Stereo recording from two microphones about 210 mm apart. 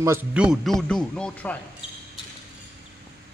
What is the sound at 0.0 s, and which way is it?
Speech, 10° right (ahead or behind).